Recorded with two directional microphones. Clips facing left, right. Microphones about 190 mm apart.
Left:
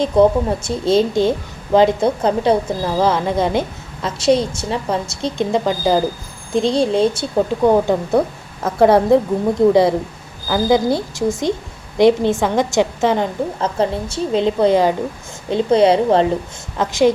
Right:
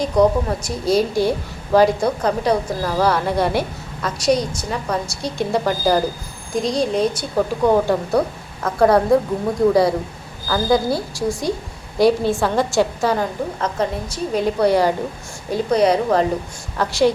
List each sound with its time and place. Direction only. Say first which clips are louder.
0.0 s a woman's voice: left 3 dB; 25° left (ahead or behind)